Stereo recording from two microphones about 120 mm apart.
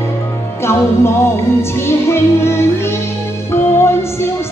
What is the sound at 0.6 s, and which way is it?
Music, 20° left (ahead or behind).